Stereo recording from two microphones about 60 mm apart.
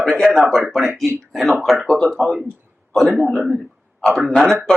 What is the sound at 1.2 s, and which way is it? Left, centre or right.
Speech, centre.